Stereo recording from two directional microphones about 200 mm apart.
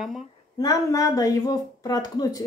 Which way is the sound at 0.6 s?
15° left (ahead or behind).